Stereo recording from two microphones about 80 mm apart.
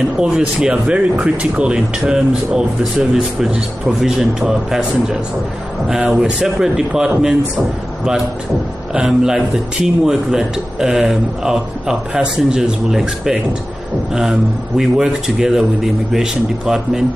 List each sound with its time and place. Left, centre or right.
0.2 s speech: centre
8.9 s speech: centre
14.8 s a man's voice: centre